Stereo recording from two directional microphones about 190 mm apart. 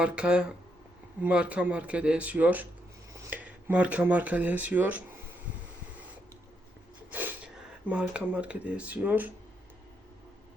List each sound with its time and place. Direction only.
0.0 s speech: 5° right (ahead or behind)
7.1 s speech: 10° right (ahead or behind)